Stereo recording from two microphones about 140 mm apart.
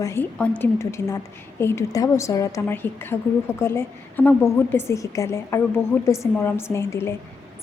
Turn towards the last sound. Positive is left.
turn(degrees=20)  # may be behind; listen again after turning